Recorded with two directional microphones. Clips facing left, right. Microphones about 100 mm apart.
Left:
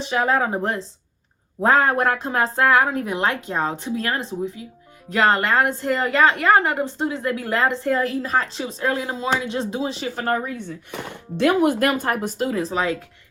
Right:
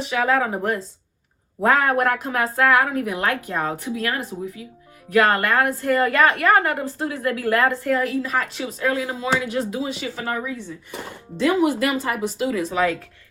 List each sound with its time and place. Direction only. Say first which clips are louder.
0.0 s a woman's voice: even; 30° left (ahead or behind)
10.2 s speech: left 5 dB; 50° left (ahead or behind); by 13.0 s 25° left (ahead or behind)